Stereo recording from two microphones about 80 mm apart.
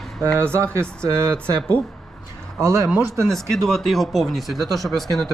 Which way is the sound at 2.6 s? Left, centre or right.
Right.